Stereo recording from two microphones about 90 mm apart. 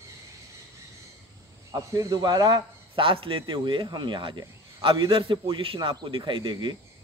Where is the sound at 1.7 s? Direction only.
40° right (ahead or behind).